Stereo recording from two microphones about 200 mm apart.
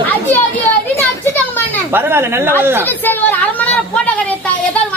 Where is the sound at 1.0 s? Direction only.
10° left (ahead or behind).